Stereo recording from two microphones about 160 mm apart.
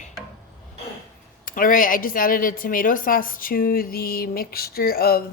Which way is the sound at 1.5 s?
60° left (ahead or behind).